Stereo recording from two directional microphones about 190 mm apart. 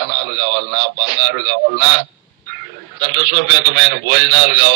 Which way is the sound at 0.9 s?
70° right (ahead or behind).